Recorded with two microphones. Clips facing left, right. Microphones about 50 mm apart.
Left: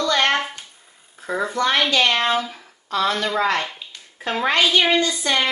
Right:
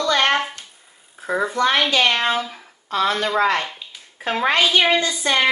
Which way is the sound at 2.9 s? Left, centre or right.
Right.